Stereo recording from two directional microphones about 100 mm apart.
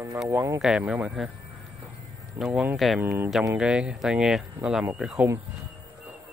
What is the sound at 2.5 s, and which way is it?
Speech, 15° right (ahead or behind).